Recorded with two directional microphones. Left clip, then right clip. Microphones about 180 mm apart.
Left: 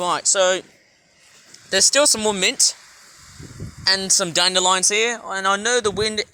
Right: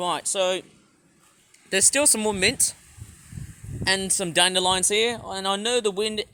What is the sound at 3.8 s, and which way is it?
Speech, 30° right (ahead or behind).